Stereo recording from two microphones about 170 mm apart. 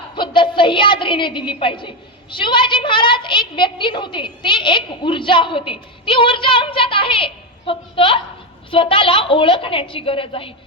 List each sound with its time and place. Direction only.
0.2 s a woman's voice: 30° left (ahead or behind)